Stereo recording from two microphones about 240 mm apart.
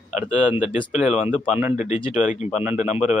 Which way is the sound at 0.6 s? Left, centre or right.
Left.